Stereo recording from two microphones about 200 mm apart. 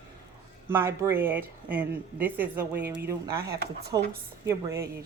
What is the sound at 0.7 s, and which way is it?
Speech, 10° right (ahead or behind).